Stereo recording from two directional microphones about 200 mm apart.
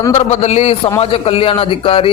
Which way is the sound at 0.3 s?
35° left (ahead or behind).